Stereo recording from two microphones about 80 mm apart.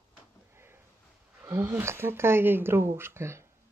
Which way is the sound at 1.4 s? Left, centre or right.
Right.